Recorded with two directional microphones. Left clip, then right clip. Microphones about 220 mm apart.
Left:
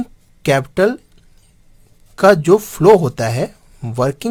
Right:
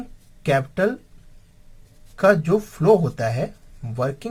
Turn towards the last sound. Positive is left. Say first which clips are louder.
# left 7 dB
turn(degrees=50)  # may be behind; listen again after turning